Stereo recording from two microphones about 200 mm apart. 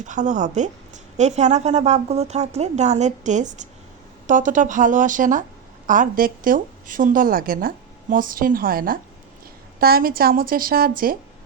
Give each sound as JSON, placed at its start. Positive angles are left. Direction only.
{"t": 0.0, "sound": "a woman's voice", "side_deg": -40}